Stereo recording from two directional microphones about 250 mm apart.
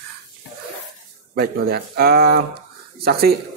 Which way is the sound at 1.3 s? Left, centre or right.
Right.